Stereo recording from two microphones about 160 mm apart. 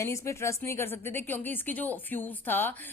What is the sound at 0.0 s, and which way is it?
Speech, 15° left (ahead or behind).